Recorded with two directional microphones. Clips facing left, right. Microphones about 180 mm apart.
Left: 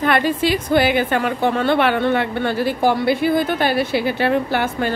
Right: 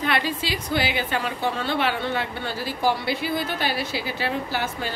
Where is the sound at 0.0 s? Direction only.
50° left (ahead or behind).